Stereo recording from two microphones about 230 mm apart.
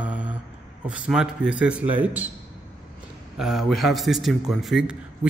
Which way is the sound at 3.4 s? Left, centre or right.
Centre.